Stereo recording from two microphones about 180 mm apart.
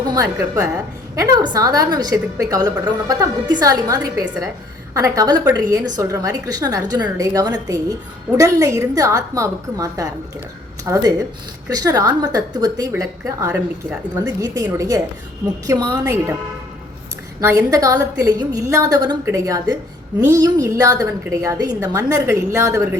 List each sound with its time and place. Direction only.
0.1 s a woman's voice: 20° right (ahead or behind)
17.4 s a woman's voice: 15° right (ahead or behind)